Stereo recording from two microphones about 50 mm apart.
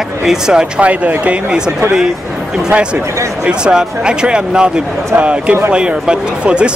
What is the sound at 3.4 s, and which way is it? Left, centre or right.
Speech, centre.